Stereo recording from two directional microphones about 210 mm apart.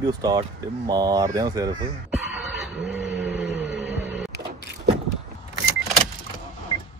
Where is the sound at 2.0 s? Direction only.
5° right (ahead or behind).